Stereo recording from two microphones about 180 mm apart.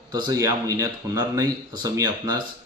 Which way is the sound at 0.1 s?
20° right (ahead or behind).